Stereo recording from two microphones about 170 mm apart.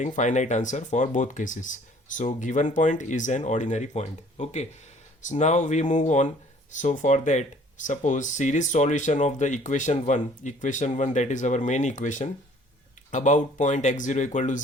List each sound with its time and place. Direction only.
0.0 s speech: 45° left (ahead or behind)